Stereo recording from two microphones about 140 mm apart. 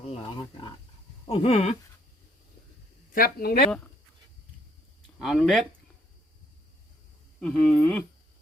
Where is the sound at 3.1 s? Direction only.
90° left.